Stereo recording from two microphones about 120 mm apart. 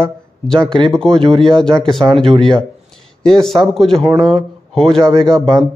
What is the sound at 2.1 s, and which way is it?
Speech, 45° right (ahead or behind).